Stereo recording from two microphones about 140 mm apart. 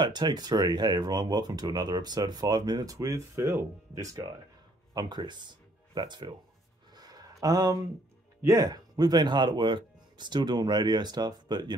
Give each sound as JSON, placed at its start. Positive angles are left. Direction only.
{"t": 0.0, "sound": "speech", "side_deg": -30}
{"t": 6.9, "sound": "a sound", "side_deg": -30}
{"t": 8.4, "sound": "speech", "side_deg": -25}